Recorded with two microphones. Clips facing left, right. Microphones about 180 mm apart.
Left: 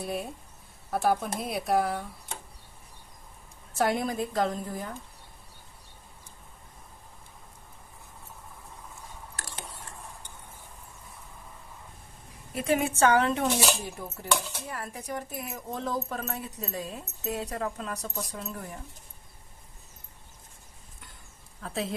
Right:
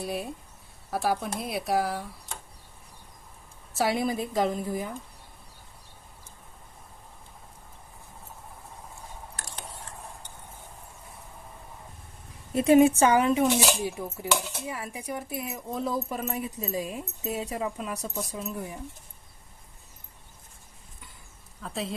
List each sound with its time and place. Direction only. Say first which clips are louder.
0.0 s speech: right 1 dB; centre (ahead or behind)
3.8 s speech: right 1 dB; 5° right (ahead or behind)
12.5 s a woman's voice: right 9 dB; 20° right (ahead or behind)
13.0 s speech: right 2 dB; 10° right (ahead or behind)
21.6 s speech: left 1 dB; centre (ahead or behind)